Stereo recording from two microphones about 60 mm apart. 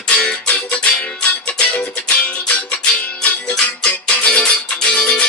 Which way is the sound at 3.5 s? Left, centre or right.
Centre.